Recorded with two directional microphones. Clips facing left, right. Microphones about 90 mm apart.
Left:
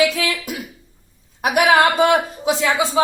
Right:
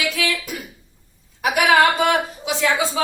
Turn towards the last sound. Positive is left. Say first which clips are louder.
# left 2 dB
turn(degrees=25)  # may be behind; listen again after turning